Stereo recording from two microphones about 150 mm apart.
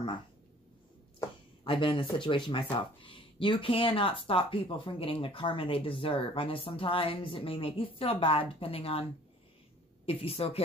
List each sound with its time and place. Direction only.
1.6 s speech: 35° left (ahead or behind)
10.0 s speech: 40° left (ahead or behind)